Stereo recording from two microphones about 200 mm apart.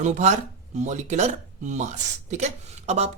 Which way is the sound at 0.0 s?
35° right (ahead or behind).